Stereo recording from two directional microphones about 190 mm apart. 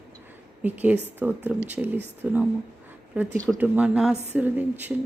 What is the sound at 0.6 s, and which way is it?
A woman's voice, 10° right (ahead or behind).